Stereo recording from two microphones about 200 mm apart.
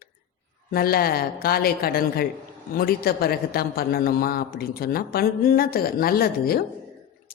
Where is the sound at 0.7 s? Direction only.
50° left (ahead or behind).